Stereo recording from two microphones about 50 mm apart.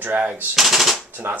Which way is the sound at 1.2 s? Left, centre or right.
Right.